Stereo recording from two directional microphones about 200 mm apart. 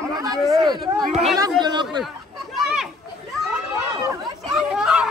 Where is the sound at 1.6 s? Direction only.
20° right (ahead or behind).